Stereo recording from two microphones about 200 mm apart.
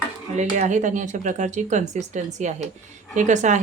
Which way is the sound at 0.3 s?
35° right (ahead or behind).